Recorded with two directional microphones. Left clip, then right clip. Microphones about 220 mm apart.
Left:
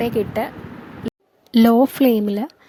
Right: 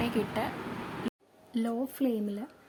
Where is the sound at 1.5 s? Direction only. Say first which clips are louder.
Left 19 dB; 45° left (ahead or behind).